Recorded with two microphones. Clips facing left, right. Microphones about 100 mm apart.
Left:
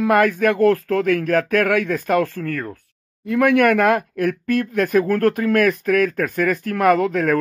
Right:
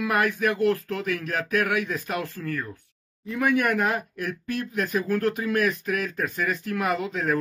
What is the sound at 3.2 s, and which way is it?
Speech, 70° left (ahead or behind).